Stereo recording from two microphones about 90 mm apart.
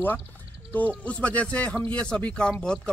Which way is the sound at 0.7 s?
15° left (ahead or behind).